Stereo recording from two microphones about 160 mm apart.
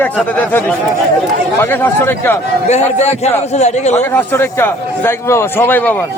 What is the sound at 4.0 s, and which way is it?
A man's voice, 15° left (ahead or behind).